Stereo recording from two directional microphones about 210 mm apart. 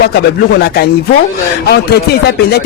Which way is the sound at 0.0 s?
50° left (ahead or behind).